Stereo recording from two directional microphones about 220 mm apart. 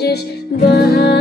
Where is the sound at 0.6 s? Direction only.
45° left (ahead or behind).